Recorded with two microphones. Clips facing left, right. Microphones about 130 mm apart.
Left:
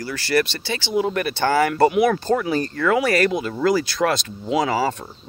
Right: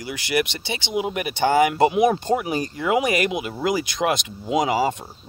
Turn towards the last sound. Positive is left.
turn(degrees=-15)  # may be behind; listen again after turning